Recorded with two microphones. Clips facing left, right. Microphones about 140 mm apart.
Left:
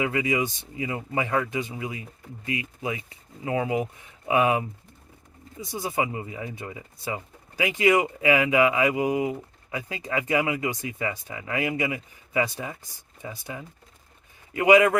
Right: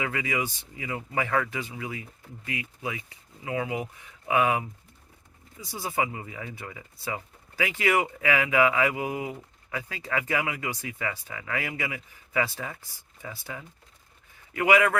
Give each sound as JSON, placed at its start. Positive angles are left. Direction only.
{"t": 0.0, "sound": "speech", "side_deg": 25}